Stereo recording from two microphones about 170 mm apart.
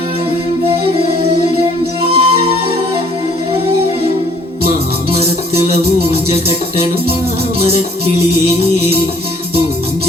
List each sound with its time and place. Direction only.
2.0 s music: 35° right (ahead or behind)
5.1 s music: 35° right (ahead or behind)
7.6 s music: 35° right (ahead or behind)